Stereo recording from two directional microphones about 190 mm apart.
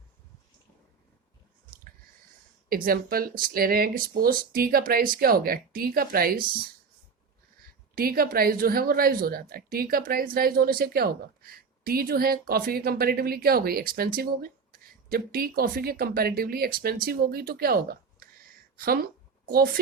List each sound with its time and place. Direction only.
2.6 s a woman's voice: 50° right (ahead or behind)
7.9 s a woman's voice: 50° right (ahead or behind)